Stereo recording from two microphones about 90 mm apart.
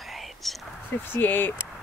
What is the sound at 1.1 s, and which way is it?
Speech, 20° left (ahead or behind).